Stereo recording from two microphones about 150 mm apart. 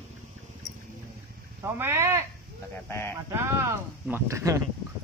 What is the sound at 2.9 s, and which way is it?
Speech, 15° left (ahead or behind).